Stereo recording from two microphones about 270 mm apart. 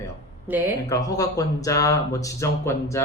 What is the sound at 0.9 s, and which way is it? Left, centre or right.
Speech, centre.